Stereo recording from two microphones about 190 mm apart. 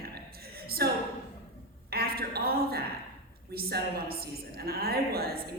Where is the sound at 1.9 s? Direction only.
55° right (ahead or behind).